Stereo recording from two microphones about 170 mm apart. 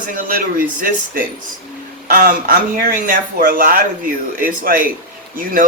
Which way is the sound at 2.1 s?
55° right (ahead or behind).